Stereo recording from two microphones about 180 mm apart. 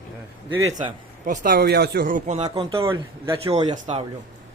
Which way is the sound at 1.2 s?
45° right (ahead or behind).